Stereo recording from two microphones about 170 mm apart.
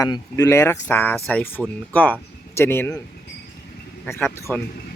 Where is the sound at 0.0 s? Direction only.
20° left (ahead or behind).